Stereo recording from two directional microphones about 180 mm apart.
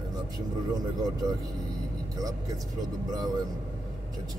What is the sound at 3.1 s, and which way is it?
Speech, 20° right (ahead or behind).